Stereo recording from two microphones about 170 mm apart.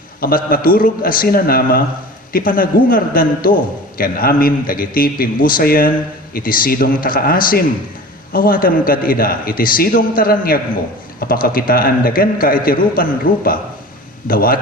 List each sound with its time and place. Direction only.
0.2 s a man's voice: 60° left (ahead or behind)